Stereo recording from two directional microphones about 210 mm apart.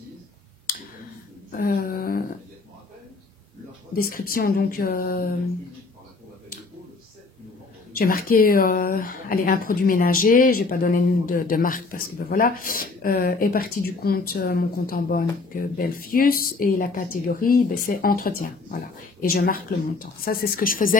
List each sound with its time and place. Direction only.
1.5 s a sound: 45° left (ahead or behind)
3.9 s speech: 45° left (ahead or behind)
7.9 s speech: 45° left (ahead or behind)